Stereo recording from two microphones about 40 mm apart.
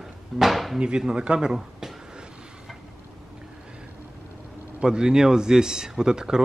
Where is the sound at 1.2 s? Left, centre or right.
Right.